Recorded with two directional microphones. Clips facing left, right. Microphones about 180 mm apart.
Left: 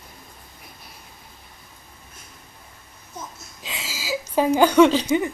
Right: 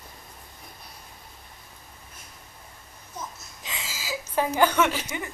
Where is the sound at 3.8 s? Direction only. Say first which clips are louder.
Left 4 dB; 90° left.